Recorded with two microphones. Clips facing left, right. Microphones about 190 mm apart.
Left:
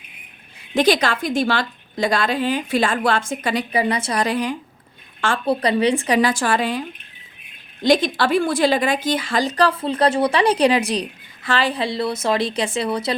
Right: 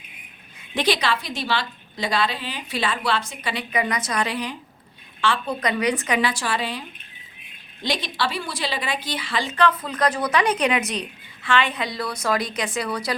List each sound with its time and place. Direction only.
0.7 s a woman's voice: 45° left (ahead or behind)
5.5 s a woman's voice: 30° left (ahead or behind)